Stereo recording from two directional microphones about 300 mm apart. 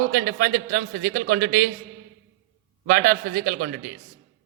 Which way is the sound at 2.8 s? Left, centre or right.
Right.